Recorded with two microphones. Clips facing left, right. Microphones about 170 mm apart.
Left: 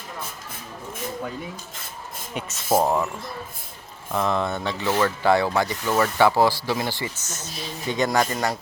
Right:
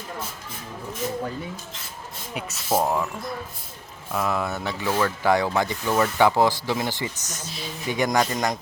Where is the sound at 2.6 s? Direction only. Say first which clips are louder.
Left 2 dB; 10° left (ahead or behind).